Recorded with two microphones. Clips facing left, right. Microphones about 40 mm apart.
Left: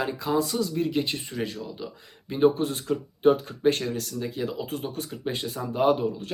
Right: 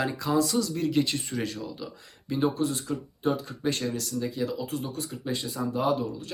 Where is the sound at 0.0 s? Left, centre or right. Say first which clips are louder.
Even; left.